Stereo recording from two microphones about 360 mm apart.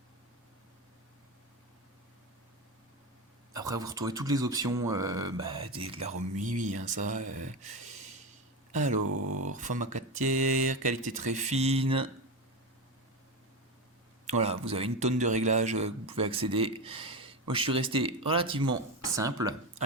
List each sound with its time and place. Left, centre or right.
3.5 s a man's voice: centre
9.0 s a sound: right
9.4 s speech: right
14.3 s a man's voice: centre